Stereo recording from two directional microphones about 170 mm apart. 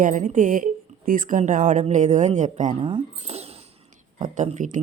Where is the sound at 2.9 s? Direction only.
35° right (ahead or behind).